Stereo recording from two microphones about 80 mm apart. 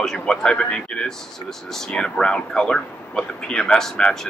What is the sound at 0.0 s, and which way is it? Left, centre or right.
Speech, centre.